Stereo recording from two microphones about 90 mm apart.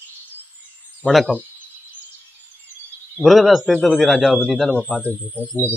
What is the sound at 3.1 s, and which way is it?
Speech, centre (ahead or behind).